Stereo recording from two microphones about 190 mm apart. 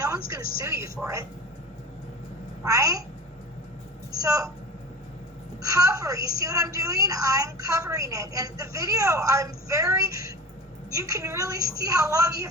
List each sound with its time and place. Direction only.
0.6 s a woman's voice: 15° right (ahead or behind)
2.6 s a woman's voice: 15° right (ahead or behind)
4.2 s a woman's voice: 15° right (ahead or behind)
5.6 s a woman's voice: 15° right (ahead or behind)